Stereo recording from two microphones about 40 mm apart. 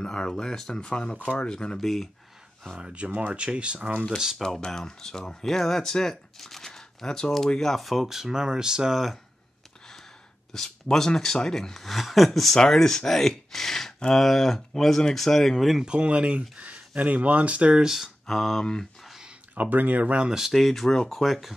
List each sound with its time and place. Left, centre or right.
0.0 s a sound: left
0.3 s speech: centre
1.8 s speech: centre
2.8 s speech: right
4.6 s speech: centre
10.5 s speech: centre
15.8 s speech: right
17.8 s speech: centre
18.2 s speech: centre
19.5 s speech: right
20.2 s speech: centre
20.5 s speech: centre